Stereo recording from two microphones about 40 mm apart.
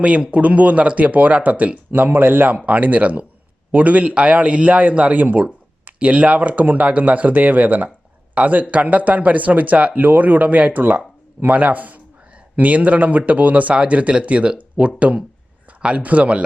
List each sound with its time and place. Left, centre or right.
0.0 s speech: right
2.0 s speech: right
2.6 s a man's voice: right